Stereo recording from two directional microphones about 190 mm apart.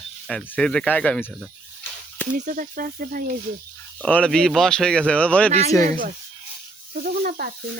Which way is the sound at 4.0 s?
5° left (ahead or behind).